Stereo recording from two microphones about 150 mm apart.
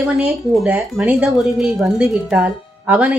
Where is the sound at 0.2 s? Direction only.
5° right (ahead or behind).